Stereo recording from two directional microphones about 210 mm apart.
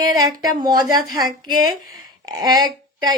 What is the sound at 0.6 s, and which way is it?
A woman's voice, 20° right (ahead or behind).